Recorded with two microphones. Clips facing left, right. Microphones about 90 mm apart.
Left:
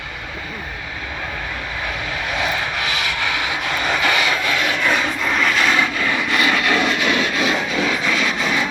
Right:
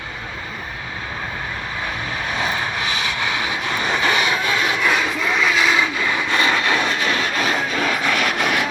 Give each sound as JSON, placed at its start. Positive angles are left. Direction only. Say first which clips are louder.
{"t": 2.4, "sound": "vehicle", "louder": "even", "side_deg": -30}
{"t": 5.2, "sound": "vehicle", "louder": "even", "side_deg": -5}
{"t": 6.0, "sound": "a sound", "louder": "even", "side_deg": -20}